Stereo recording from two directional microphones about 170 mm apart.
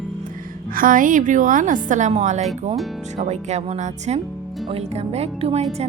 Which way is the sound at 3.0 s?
45° right (ahead or behind).